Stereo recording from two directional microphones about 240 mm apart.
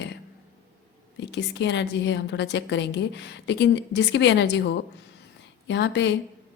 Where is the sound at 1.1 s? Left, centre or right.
Left.